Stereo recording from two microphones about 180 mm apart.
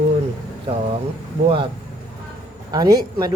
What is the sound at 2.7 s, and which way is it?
Speech, 20° right (ahead or behind).